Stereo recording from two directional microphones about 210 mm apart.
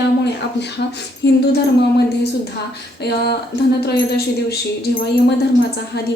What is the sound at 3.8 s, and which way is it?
Speech, 50° left (ahead or behind).